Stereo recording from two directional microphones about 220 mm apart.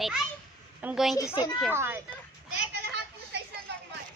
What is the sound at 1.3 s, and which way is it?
Speech, 20° left (ahead or behind).